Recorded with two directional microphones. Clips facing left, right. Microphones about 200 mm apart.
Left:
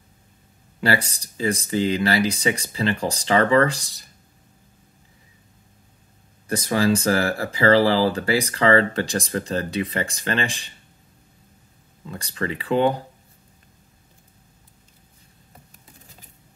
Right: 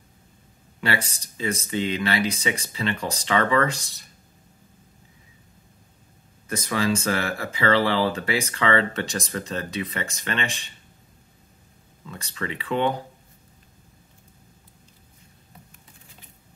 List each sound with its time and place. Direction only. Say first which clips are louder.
0.7 s speech: left 4 dB; 35° left (ahead or behind)
6.4 s speech: left 4 dB; 30° left (ahead or behind)
12.1 s speech: left 4 dB; 35° left (ahead or behind)